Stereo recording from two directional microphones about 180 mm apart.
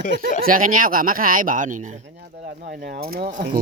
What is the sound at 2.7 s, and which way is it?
Speech, 60° right (ahead or behind).